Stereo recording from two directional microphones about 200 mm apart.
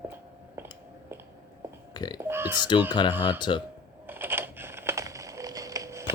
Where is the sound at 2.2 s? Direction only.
10° right (ahead or behind).